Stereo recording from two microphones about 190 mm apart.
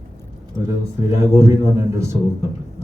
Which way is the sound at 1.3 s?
15° right (ahead or behind).